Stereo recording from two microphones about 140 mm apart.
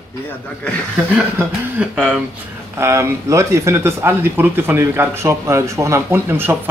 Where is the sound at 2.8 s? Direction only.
20° right (ahead or behind).